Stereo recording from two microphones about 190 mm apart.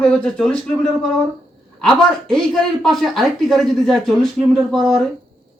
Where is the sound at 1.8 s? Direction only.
Centre (ahead or behind).